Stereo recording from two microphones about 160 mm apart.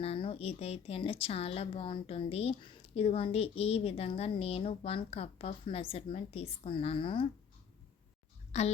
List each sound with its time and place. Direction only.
0.0 s a woman's voice: 35° left (ahead or behind)
8.5 s a woman's voice: 45° left (ahead or behind)